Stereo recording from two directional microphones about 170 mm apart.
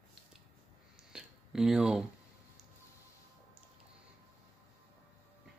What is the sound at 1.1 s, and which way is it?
Speech, 5° right (ahead or behind).